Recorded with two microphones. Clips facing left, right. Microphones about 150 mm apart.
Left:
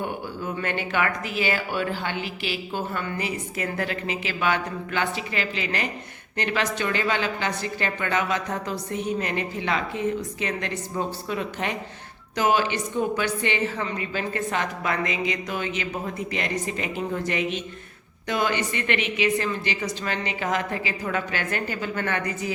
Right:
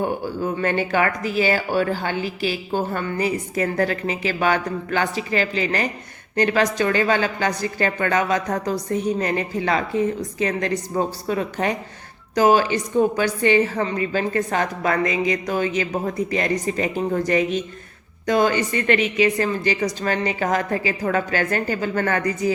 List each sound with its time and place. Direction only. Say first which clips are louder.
0.0 s speech: right 7 dB; 40° right (ahead or behind)